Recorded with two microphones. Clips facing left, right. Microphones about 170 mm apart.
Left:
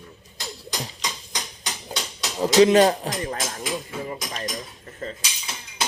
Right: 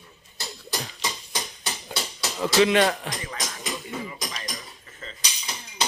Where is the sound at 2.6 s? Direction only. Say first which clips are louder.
Left 5 dB; 40° left (ahead or behind).